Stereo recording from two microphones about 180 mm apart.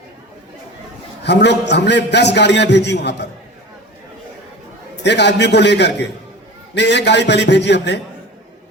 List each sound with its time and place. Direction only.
1.2 s a man's voice: 70° left (ahead or behind)
5.0 s a man's voice: 70° left (ahead or behind)